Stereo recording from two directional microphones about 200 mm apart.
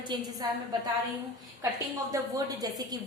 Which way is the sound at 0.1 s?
20° right (ahead or behind).